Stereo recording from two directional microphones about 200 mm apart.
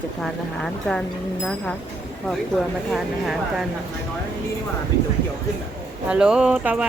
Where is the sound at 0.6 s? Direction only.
5° left (ahead or behind).